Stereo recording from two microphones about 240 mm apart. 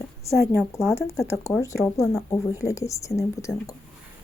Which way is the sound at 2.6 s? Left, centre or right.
Centre.